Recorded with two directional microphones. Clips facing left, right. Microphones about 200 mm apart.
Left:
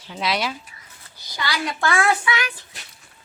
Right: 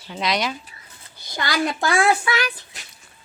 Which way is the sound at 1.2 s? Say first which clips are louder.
Right 4 dB; 50° right (ahead or behind).